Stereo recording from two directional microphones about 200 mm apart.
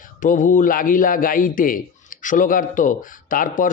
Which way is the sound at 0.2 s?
40° left (ahead or behind).